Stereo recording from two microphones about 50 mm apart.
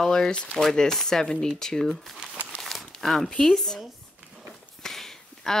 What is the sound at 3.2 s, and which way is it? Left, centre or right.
Speech, centre.